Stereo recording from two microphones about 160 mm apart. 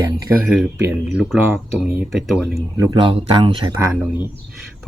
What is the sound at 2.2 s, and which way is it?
Speech, centre (ahead or behind).